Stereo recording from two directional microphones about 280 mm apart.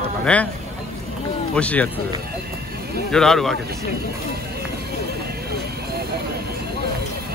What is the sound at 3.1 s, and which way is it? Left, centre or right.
Speech, centre.